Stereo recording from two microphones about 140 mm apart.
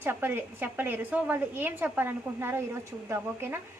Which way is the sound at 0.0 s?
15° right (ahead or behind).